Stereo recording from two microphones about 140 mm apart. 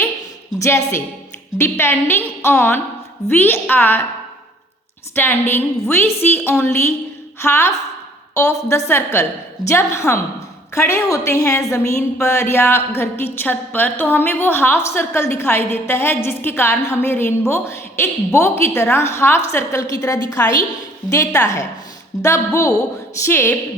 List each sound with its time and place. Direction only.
0.6 s a woman's voice: 20° left (ahead or behind)
5.1 s a woman's voice: 15° left (ahead or behind)